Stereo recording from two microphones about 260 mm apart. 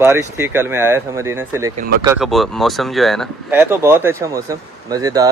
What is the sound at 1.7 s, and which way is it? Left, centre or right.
Speech, right.